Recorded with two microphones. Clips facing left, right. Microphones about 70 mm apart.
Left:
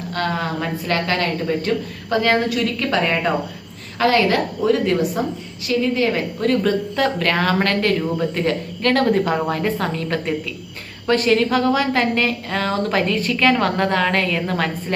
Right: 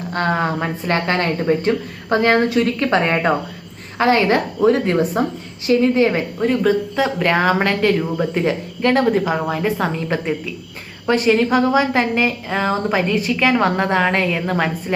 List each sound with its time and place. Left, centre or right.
0.1 s a woman's voice: right
6.4 s a woman's voice: centre
9.1 s a woman's voice: centre